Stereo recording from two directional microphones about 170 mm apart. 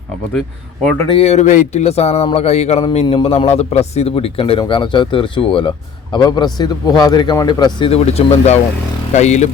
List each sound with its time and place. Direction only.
1.1 s a man's voice: 35° left (ahead or behind)